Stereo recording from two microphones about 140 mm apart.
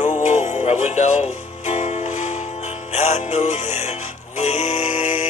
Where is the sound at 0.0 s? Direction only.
55° left (ahead or behind).